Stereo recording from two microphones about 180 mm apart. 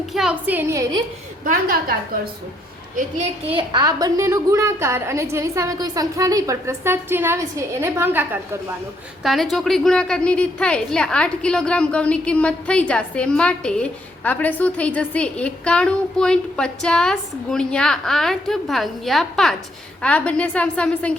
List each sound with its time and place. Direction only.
0.1 s a woman's voice: 5° right (ahead or behind)
2.9 s a woman's voice: 35° right (ahead or behind); by 8.4 s 10° right (ahead or behind)
9.2 s a woman's voice: centre (ahead or behind)